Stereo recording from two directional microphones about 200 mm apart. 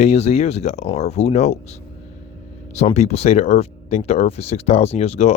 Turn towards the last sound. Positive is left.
turn(degrees=30)  # may be behind; listen again after turning